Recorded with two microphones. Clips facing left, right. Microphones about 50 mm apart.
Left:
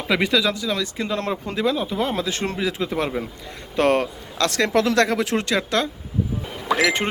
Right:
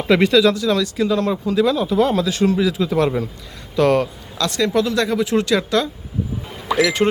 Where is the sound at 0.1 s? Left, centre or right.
Centre.